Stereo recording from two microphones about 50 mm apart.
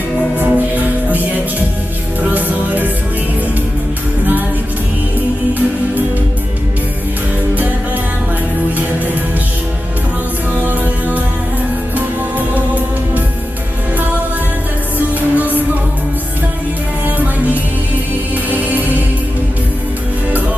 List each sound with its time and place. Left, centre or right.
0.3 s music: right
2.3 s music: right
10.6 s music: right
14.9 s music: right
17.2 s music: right